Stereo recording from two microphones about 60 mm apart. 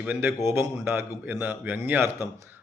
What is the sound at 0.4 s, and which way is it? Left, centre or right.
Speech, right.